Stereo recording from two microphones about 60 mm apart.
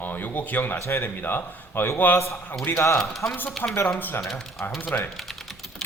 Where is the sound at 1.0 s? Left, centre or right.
Left.